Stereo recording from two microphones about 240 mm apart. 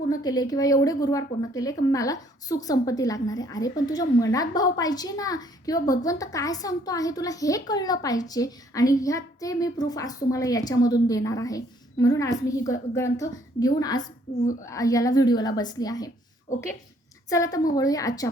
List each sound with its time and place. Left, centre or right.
0.1 s a woman's voice: centre
17.2 s a woman's voice: centre